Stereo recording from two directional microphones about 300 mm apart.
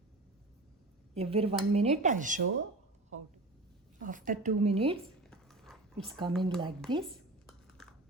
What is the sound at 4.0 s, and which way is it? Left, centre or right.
Speech, right.